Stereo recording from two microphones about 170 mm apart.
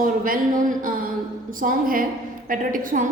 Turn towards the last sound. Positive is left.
turn(degrees=-55)  # may be behind; listen again after turning